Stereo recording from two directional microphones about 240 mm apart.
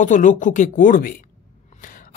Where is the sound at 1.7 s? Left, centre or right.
Left.